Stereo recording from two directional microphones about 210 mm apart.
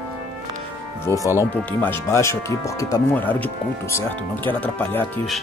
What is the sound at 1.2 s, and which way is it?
Speech, 10° left (ahead or behind).